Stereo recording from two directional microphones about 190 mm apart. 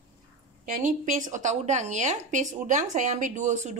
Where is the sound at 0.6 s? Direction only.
45° right (ahead or behind).